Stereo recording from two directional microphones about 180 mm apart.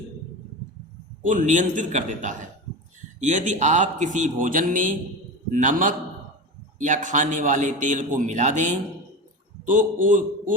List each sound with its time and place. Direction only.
1.2 s a man's voice: 45° right (ahead or behind)